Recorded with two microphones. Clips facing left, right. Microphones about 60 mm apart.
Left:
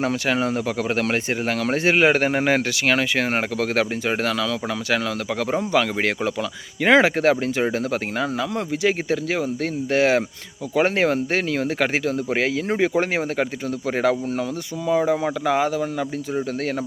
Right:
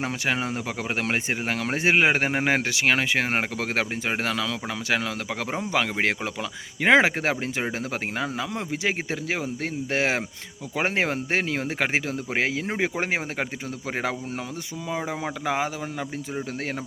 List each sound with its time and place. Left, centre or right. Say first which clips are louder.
0.0 s speech: left 5 dB; centre